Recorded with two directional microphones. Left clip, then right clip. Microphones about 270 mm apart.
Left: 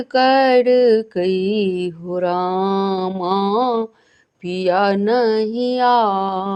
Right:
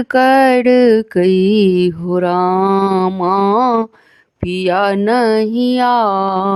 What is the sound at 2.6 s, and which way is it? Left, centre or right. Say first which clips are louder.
Mantra: right 6 dB; right.